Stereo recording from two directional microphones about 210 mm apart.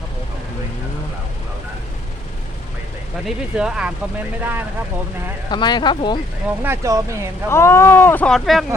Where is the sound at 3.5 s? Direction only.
5° right (ahead or behind).